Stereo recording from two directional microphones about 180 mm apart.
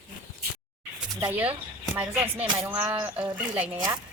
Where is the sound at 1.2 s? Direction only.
10° right (ahead or behind).